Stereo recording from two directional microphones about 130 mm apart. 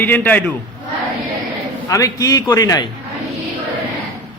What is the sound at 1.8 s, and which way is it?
Speech, 25° left (ahead or behind).